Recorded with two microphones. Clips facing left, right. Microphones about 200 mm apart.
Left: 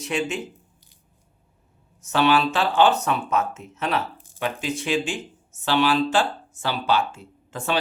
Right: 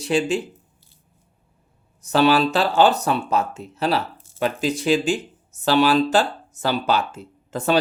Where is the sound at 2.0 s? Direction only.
35° right (ahead or behind).